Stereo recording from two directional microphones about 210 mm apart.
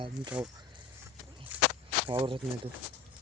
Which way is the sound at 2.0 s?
25° right (ahead or behind).